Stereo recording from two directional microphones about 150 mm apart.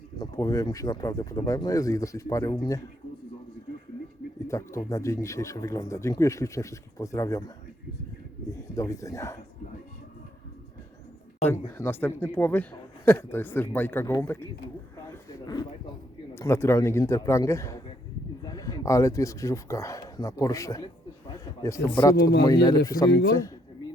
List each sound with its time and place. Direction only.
0.2 s speech: 25° left (ahead or behind)
4.4 s speech: 20° left (ahead or behind)
8.7 s speech: 20° left (ahead or behind)
11.4 s speech: 15° left (ahead or behind)
15.1 s a sound: 25° left (ahead or behind)
16.3 s speech: 20° left (ahead or behind)
21.3 s a sound: 20° left (ahead or behind)
22.4 s speech: 25° left (ahead or behind)